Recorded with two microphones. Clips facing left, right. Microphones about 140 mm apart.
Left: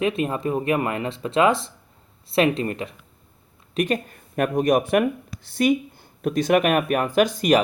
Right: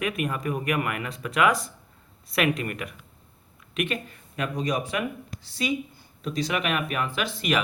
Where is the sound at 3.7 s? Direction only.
40° left (ahead or behind).